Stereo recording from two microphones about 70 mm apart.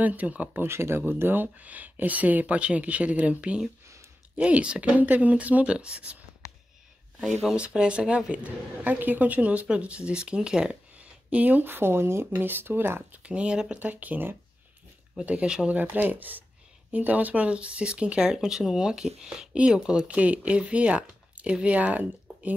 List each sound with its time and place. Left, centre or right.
0.0 s a woman's voice: right
7.2 s a woman's voice: centre; by 13.2 s right
13.2 s a woman's voice: centre
15.7 s a woman's voice: right